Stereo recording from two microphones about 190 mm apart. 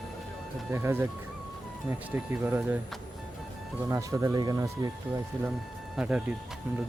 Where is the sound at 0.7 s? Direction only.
10° right (ahead or behind).